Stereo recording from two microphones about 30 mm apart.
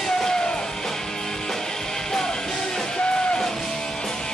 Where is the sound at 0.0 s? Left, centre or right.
Centre.